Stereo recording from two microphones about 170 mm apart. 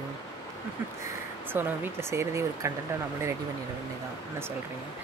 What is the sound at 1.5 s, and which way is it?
Speech, 15° right (ahead or behind).